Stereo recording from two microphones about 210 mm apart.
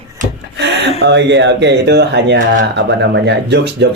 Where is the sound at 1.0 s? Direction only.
55° right (ahead or behind).